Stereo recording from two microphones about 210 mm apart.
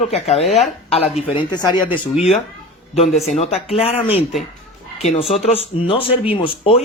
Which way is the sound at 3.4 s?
30° left (ahead or behind).